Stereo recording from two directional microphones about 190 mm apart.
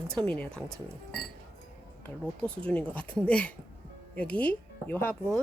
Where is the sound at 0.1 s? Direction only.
5° left (ahead or behind).